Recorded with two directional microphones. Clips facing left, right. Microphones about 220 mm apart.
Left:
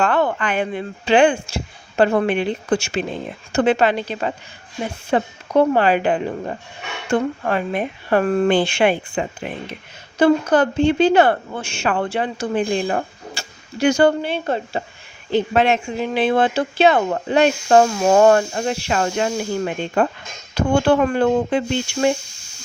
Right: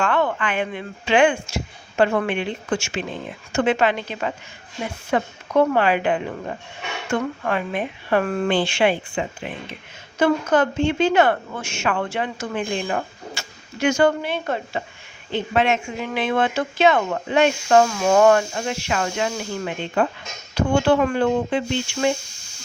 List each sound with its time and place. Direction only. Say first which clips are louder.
0.0 s speech: left 3 dB; 35° left (ahead or behind)
10.2 s speech: left 3 dB; 35° left (ahead or behind)